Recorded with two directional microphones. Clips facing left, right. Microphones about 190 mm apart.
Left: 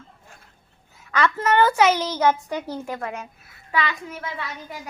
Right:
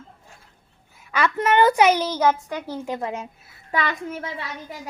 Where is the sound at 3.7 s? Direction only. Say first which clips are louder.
Right 1 dB; 50° right (ahead or behind).